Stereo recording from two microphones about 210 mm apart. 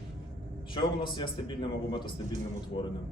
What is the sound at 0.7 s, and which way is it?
A man's voice, 25° left (ahead or behind).